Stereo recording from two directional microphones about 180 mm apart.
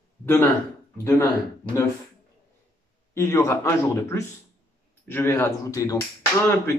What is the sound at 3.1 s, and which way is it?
Speech, 15° left (ahead or behind).